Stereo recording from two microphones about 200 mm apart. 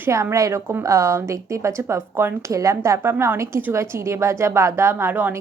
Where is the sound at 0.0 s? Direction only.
15° right (ahead or behind).